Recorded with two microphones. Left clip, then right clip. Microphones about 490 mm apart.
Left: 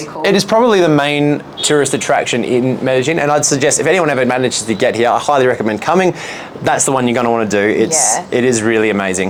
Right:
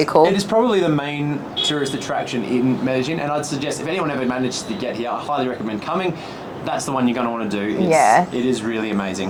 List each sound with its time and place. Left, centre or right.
0.2 s speech: left
6.9 s speech: left
7.9 s a woman's voice: right
8.4 s speech: left